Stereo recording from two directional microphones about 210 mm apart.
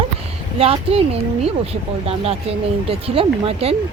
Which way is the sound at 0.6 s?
25° right (ahead or behind).